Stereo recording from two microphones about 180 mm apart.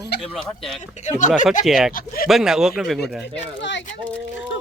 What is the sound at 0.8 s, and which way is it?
Speech, 40° left (ahead or behind).